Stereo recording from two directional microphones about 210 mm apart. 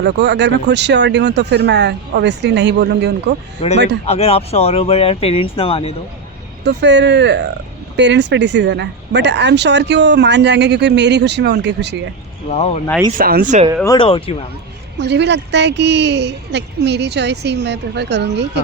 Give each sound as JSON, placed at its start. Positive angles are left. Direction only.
{"t": 0.0, "sound": "speech", "side_deg": -55}
{"t": 3.6, "sound": "speech", "side_deg": 30}
{"t": 6.7, "sound": "speech", "side_deg": -55}
{"t": 12.5, "sound": "speech", "side_deg": 30}
{"t": 13.1, "sound": "speech", "side_deg": -45}
{"t": 13.8, "sound": "speech", "side_deg": 20}
{"t": 14.9, "sound": "a woman's voice", "side_deg": -55}